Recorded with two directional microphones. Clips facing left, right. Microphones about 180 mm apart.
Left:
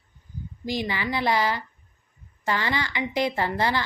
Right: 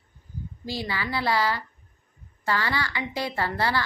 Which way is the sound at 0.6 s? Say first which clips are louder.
Left 3 dB; 15° left (ahead or behind).